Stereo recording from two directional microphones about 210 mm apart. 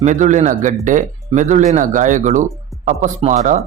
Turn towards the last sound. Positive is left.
turn(degrees=-35)  # may be behind; listen again after turning